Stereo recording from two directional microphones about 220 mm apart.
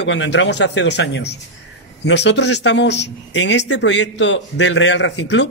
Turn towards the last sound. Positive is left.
turn(degrees=55)  # may be behind; listen again after turning